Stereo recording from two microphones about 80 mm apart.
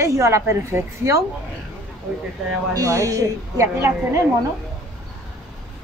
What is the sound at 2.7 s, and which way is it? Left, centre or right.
Speech, right.